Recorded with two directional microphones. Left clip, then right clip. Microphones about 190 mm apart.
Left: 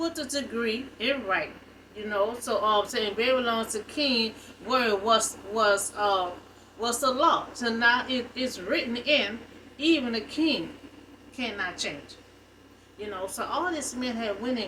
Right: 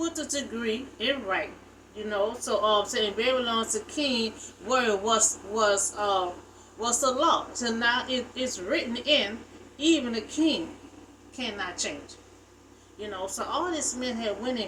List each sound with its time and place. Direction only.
0.6 s a woman's voice: 15° right (ahead or behind)
13.0 s a woman's voice: 15° right (ahead or behind)